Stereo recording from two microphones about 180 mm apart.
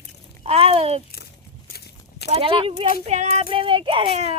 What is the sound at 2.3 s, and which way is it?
A child's voice, 30° right (ahead or behind).